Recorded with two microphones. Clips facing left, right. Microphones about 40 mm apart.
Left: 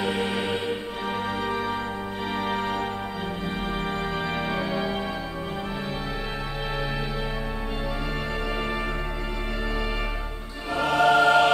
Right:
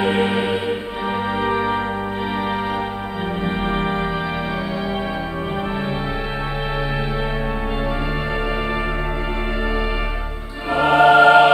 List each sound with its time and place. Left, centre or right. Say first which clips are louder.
0.0 s music: right 8 dB; right
3.4 s music: right 8 dB; right
10.7 s choir: right 7 dB; right